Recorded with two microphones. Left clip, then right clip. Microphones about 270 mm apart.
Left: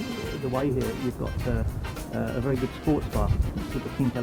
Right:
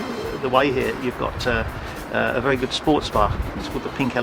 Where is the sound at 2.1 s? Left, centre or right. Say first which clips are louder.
Right 9 dB; centre.